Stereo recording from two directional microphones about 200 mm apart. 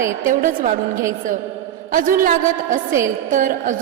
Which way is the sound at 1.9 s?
45° right (ahead or behind).